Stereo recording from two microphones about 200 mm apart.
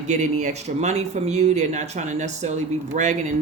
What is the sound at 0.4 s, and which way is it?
Speech, 35° right (ahead or behind).